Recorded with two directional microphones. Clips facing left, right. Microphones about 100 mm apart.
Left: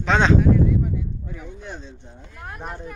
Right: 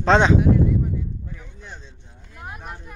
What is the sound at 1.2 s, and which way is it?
Speech, 10° left (ahead or behind).